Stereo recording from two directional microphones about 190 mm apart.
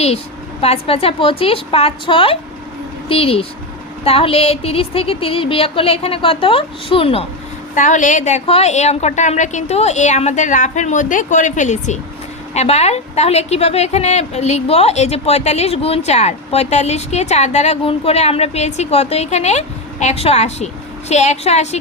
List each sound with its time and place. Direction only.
0.6 s speech: 30° left (ahead or behind)
7.8 s a woman's voice: 40° left (ahead or behind)